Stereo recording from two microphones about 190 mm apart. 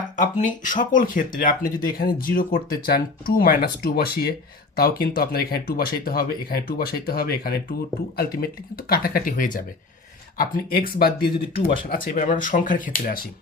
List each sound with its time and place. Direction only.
0.2 s speech: 40° left (ahead or behind)